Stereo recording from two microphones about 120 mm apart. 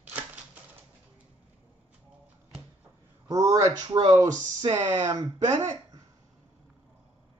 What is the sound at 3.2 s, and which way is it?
Speech, 25° right (ahead or behind).